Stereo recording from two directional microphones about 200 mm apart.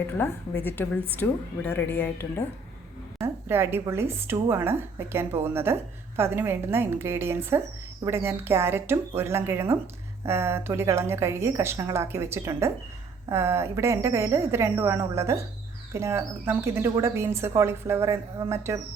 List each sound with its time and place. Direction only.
0.6 s speech: 10° left (ahead or behind)
3.2 s speech: 10° right (ahead or behind)